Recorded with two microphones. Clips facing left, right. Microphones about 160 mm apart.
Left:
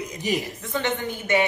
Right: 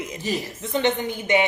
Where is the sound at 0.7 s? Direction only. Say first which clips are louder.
Right 4 dB; 20° right (ahead or behind).